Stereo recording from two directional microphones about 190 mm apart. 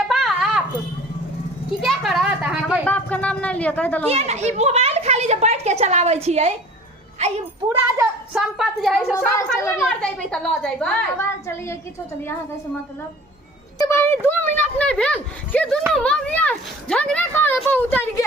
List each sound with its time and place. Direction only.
0.1 s a sound: centre (ahead or behind)
1.7 s a sound: centre (ahead or behind)
2.8 s speech: 5° left (ahead or behind)
4.1 s a child's voice: 35° right (ahead or behind)
8.3 s a woman's voice: 5° right (ahead or behind)
9.1 s a child's voice: 15° left (ahead or behind)
9.8 s a woman's voice: 5° left (ahead or behind)
13.7 s a sound: 15° left (ahead or behind)
15.9 s a child's voice: 5° left (ahead or behind)